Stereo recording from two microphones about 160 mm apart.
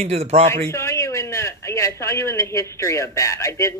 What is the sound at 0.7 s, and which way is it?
A man's voice, 15° left (ahead or behind).